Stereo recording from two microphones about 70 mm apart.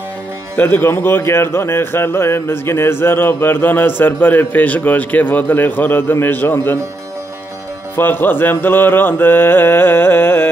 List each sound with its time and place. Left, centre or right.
0.6 s a man's voice: left
7.9 s a man's voice: left